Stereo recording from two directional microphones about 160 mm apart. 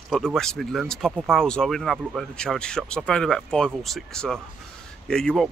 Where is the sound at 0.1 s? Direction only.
5° left (ahead or behind).